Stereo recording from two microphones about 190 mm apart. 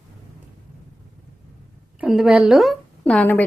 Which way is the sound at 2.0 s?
Centre (ahead or behind).